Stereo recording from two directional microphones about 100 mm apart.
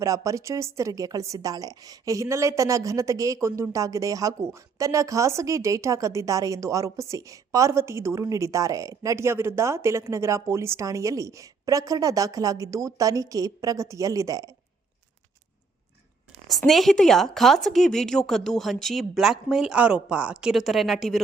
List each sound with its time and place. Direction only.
0.0 s a woman's voice: 35° right (ahead or behind)
16.5 s speech: centre (ahead or behind)